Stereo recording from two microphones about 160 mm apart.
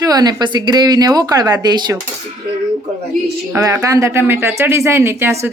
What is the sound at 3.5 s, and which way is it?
Speech, 20° right (ahead or behind).